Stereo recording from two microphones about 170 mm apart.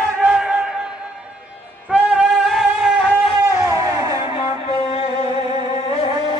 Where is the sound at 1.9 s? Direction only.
5° right (ahead or behind).